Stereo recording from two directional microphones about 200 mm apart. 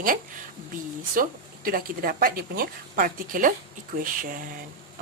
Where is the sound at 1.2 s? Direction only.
45° right (ahead or behind).